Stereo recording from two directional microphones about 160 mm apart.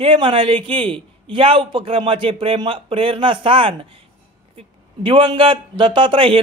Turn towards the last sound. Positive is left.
turn(degrees=-35)  # may be behind; listen again after turning